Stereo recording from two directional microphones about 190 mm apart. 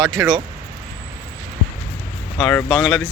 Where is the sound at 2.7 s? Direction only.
Centre (ahead or behind).